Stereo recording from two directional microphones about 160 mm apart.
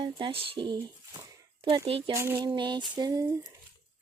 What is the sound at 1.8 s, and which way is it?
Speech, 35° right (ahead or behind).